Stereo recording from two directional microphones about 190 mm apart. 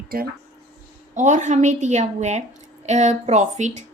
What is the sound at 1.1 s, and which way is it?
A woman's voice, 40° right (ahead or behind).